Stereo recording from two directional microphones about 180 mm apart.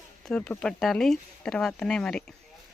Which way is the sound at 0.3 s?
5° left (ahead or behind).